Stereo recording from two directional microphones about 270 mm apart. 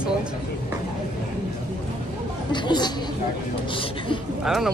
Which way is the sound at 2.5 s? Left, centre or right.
Centre.